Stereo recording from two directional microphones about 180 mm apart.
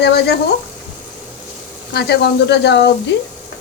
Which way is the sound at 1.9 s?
65° left (ahead or behind).